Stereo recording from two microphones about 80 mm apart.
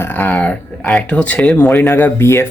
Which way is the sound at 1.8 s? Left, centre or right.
Left.